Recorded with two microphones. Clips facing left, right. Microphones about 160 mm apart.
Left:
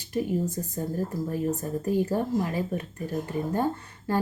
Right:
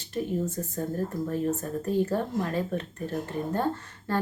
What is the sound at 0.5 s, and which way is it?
Speech, 10° left (ahead or behind).